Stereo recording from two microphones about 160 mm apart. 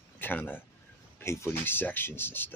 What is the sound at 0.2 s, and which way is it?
Speech, 10° left (ahead or behind).